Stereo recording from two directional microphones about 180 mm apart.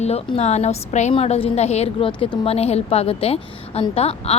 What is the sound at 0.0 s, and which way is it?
A woman's voice, 35° left (ahead or behind).